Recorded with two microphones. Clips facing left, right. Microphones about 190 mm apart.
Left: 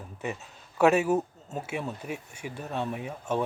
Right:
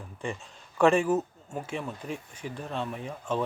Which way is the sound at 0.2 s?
5° left (ahead or behind).